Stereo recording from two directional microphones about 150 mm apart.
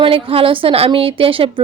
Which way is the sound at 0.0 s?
40° right (ahead or behind).